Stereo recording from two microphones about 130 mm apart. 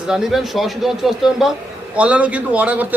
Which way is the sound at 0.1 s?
Centre (ahead or behind).